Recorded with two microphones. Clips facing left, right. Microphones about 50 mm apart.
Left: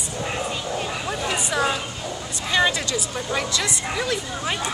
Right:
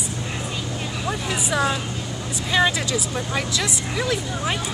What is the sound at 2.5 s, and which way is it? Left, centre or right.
Speech, centre.